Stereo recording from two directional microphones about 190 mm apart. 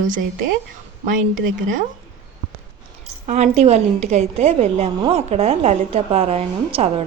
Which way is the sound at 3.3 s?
35° right (ahead or behind).